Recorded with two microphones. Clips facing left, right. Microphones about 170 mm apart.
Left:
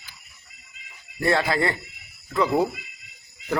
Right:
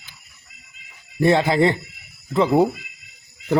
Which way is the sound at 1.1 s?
20° right (ahead or behind).